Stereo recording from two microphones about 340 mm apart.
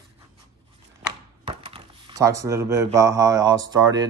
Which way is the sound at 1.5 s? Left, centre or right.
Centre.